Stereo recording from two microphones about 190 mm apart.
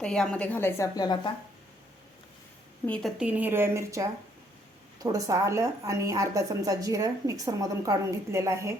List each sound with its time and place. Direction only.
0.0 s a woman's voice: 5° left (ahead or behind); by 1.3 s 20° left (ahead or behind)
2.8 s a woman's voice: 5° left (ahead or behind)
3.2 s a woman's voice: 5° right (ahead or behind)
5.1 s a woman's voice: 15° right (ahead or behind)